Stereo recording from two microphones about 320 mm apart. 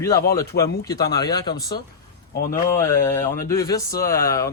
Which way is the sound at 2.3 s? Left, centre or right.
Left.